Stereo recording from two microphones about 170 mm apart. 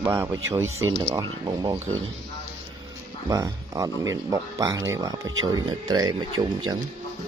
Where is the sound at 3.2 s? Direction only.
20° right (ahead or behind).